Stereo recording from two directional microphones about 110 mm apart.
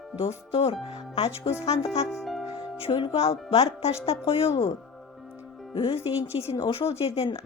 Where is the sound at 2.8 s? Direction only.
50° left (ahead or behind).